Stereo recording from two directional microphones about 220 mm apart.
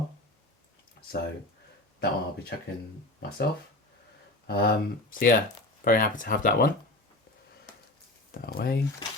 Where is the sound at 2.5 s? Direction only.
45° left (ahead or behind).